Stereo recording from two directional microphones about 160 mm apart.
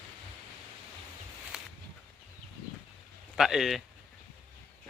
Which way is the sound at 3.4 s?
Centre (ahead or behind).